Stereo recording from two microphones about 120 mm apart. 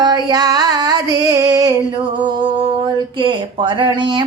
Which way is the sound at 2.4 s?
45° right (ahead or behind).